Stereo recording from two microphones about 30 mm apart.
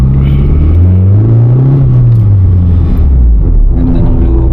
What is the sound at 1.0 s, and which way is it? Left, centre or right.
Rumble, centre.